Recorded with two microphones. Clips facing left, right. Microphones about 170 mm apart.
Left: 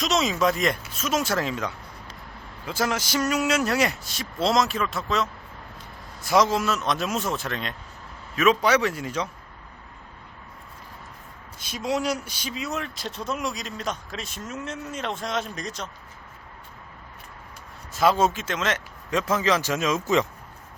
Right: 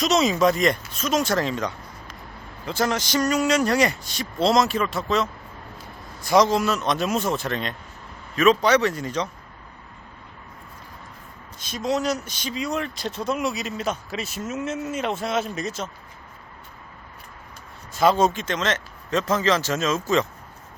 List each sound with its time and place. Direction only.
0.0 s speech: centre (ahead or behind)
11.6 s speech: 10° left (ahead or behind)
17.9 s speech: centre (ahead or behind)